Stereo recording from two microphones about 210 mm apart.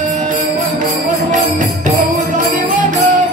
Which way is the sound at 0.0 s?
35° right (ahead or behind).